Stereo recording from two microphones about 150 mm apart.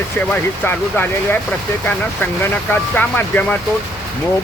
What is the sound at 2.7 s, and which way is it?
Speech, 10° left (ahead or behind).